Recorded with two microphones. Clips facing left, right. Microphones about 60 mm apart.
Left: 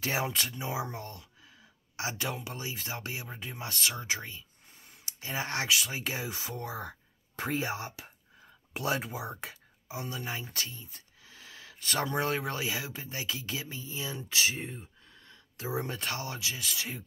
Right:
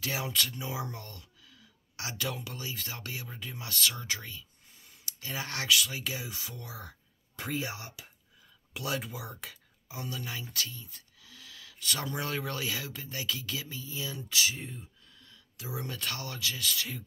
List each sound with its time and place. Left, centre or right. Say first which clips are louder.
0.0 s speech: left 2 dB; left